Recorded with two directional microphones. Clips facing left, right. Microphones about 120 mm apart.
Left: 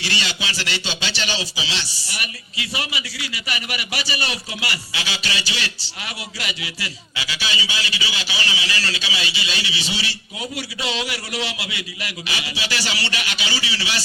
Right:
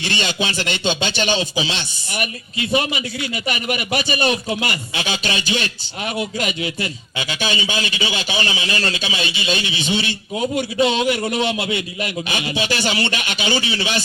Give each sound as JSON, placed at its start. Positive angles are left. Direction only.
{"t": 0.0, "sound": "a man's voice", "side_deg": -50}
{"t": 7.2, "sound": "a man's voice", "side_deg": -50}